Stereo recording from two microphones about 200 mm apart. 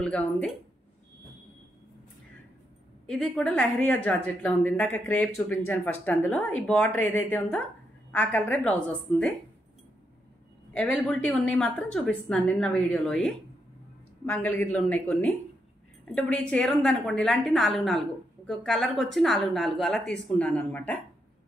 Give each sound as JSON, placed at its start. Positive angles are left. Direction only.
{"t": 0.0, "sound": "a woman's voice", "side_deg": 5}
{"t": 3.1, "sound": "speech", "side_deg": 0}
{"t": 10.7, "sound": "a woman's voice", "side_deg": 5}